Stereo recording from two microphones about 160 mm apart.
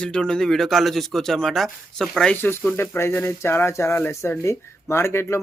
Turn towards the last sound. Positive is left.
turn(degrees=15)  # may be behind; listen again after turning